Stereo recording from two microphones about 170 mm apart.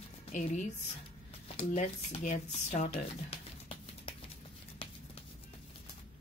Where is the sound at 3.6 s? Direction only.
30° left (ahead or behind).